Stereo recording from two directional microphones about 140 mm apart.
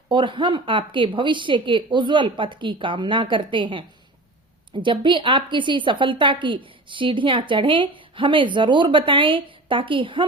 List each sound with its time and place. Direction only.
0.1 s a woman's voice: 35° right (ahead or behind)